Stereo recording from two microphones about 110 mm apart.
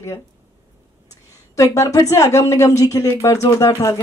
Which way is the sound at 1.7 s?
30° left (ahead or behind).